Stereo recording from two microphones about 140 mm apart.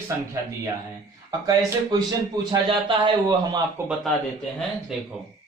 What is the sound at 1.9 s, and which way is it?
Speech, 30° right (ahead or behind).